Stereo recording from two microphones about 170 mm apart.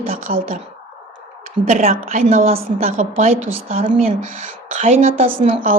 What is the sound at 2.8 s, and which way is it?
A woman's voice, 50° right (ahead or behind).